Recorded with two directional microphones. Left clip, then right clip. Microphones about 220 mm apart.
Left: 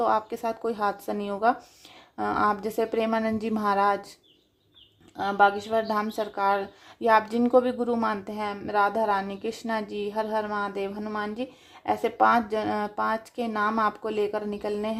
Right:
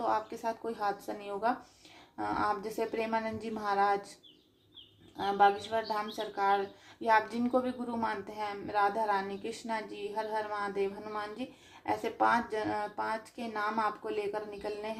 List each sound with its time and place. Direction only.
0.0 s a woman's voice: 40° left (ahead or behind)
5.1 s a woman's voice: 40° left (ahead or behind)